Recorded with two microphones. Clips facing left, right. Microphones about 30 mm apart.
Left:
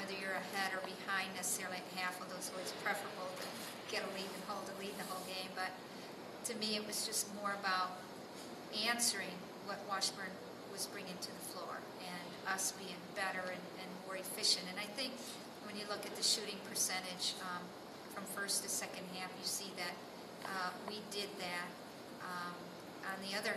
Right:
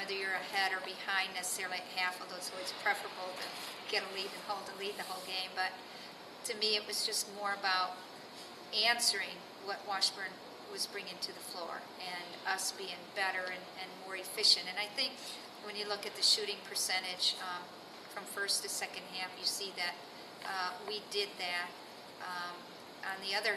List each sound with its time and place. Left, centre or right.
0.0 s a sound: right
0.4 s a woman's voice: right
5.5 s a woman's voice: right
6.4 s a woman's voice: right
7.6 s a sound: right
8.7 s a woman's voice: right
13.4 s a woman's voice: right
14.3 s a woman's voice: right
22.2 s a sound: right
23.2 s a woman's voice: right